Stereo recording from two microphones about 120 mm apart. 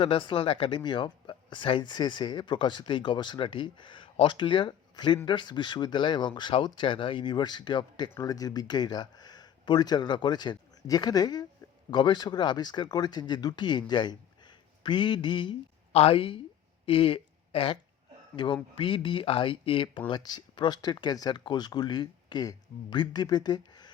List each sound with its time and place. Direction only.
0.0 s speech: 45° left (ahead or behind)
15.9 s speech: 55° left (ahead or behind); by 23.9 s 35° left (ahead or behind)